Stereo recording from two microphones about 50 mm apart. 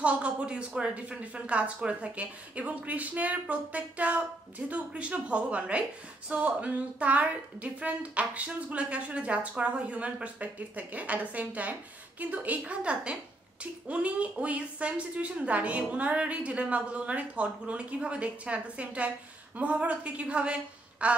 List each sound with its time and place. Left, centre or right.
0.0 s speech: right